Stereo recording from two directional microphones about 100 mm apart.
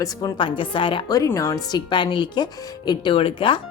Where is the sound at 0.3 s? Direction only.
55° left (ahead or behind).